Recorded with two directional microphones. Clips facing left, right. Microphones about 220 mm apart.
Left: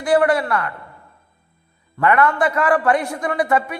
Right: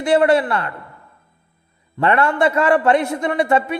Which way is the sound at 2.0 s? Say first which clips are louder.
Even; 30° right (ahead or behind).